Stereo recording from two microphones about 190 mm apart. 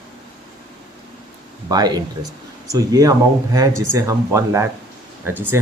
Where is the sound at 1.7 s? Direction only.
20° right (ahead or behind).